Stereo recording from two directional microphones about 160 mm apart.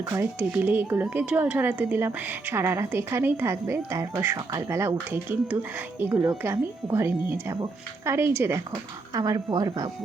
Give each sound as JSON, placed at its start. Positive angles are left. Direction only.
{"t": 0.0, "sound": "a woman's voice", "side_deg": -15}